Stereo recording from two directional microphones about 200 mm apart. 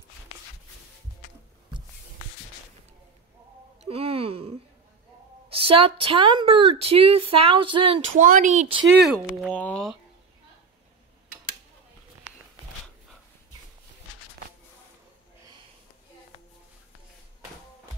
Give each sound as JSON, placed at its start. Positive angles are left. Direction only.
{"t": 3.8, "sound": "wail", "side_deg": -30}
{"t": 5.5, "sound": "a woman's voice", "side_deg": -25}
{"t": 8.1, "sound": "speech", "side_deg": -40}
{"t": 9.0, "sound": "speech", "side_deg": 0}